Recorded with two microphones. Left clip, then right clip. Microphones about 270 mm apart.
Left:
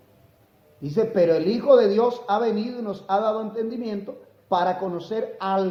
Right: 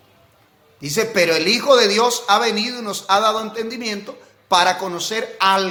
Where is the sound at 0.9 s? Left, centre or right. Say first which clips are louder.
Right 3 dB; centre.